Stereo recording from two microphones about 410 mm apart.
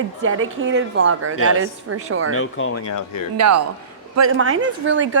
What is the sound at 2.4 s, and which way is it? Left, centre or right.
Speech, left.